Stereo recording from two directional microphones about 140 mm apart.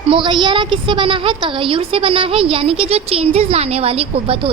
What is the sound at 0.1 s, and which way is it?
A woman's voice, 35° right (ahead or behind).